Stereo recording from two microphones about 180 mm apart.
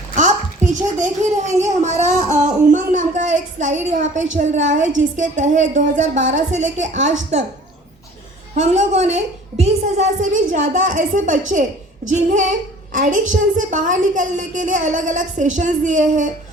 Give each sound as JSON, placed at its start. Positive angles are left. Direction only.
{"t": 0.2, "sound": "a sound", "side_deg": -40}
{"t": 4.9, "sound": "a woman's voice", "side_deg": -45}
{"t": 8.5, "sound": "a woman's voice", "side_deg": -40}